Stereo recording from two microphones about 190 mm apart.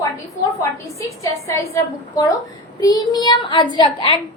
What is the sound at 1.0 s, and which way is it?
A woman's voice, 15° left (ahead or behind).